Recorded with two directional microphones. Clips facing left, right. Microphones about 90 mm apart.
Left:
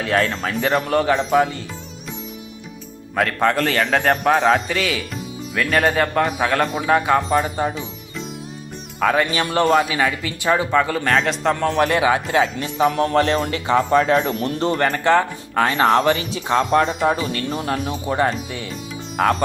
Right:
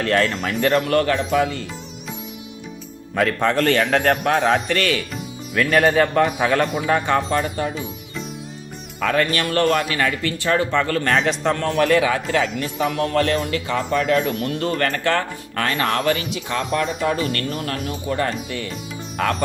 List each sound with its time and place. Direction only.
0.0 s a man's voice: 5° left (ahead or behind)
0.9 s speech: 15° left (ahead or behind)
1.2 s speech: 40° left (ahead or behind)
3.4 s a man's voice: centre (ahead or behind)
9.0 s speech: 10° left (ahead or behind)
11.5 s speech: 15° left (ahead or behind)
11.9 s speech: 25° left (ahead or behind)
12.7 s speech: 35° left (ahead or behind)
17.1 s speech: 15° left (ahead or behind)
17.6 s speech: 25° left (ahead or behind)
19.1 s music: 15° left (ahead or behind)